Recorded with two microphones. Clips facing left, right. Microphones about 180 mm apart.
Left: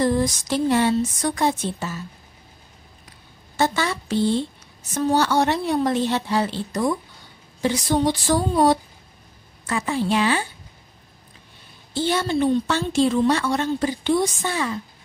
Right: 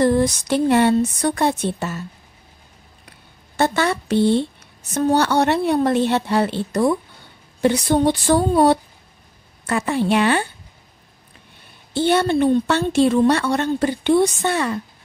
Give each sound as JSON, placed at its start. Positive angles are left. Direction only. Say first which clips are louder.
{"t": 0.0, "sound": "a woman's voice", "louder": "right 4 dB", "side_deg": -60}
{"t": 3.1, "sound": "a sound", "louder": "right 1 dB", "side_deg": -60}
{"t": 4.9, "sound": "a woman's voice", "louder": "right 2 dB", "side_deg": -60}
{"t": 11.9, "sound": "a woman's voice", "louder": "right 5 dB", "side_deg": -60}